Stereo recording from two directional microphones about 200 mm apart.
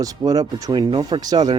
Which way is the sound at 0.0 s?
15° right (ahead or behind).